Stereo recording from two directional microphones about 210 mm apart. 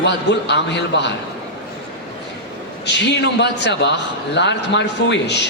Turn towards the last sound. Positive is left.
turn(degrees=55)  # may be behind; listen again after turning